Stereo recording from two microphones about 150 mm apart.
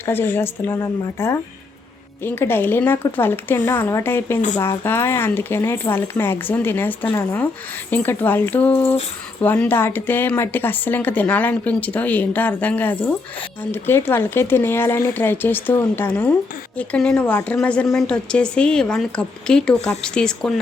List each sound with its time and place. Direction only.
0.0 s speech: 15° left (ahead or behind)